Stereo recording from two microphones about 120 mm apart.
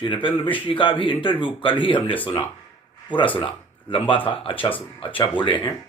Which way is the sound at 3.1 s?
45° left (ahead or behind).